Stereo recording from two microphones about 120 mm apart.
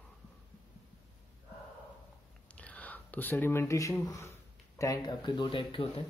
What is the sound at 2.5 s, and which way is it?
Speech, 10° left (ahead or behind).